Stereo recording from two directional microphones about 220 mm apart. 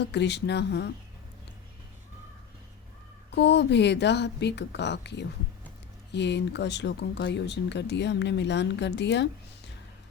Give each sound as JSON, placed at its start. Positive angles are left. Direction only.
{"t": 0.0, "sound": "speech", "side_deg": 50}
{"t": 3.3, "sound": "speech", "side_deg": 50}